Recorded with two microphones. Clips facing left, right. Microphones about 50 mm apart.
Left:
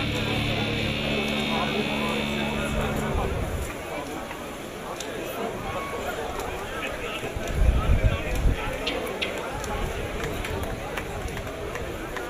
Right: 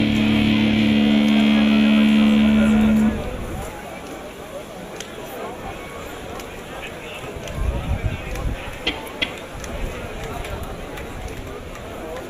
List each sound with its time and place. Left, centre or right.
0.0 s vehicle: right